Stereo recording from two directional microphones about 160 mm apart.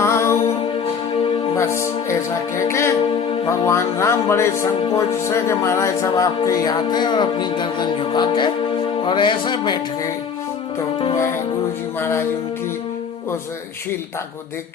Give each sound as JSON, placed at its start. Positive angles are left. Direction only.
{"t": 0.0, "sound": "music", "side_deg": 15}
{"t": 1.5, "sound": "music", "side_deg": 15}
{"t": 3.4, "sound": "speech", "side_deg": 15}
{"t": 11.9, "sound": "music", "side_deg": 15}